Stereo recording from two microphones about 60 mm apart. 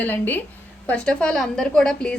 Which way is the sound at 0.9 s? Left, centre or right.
Centre.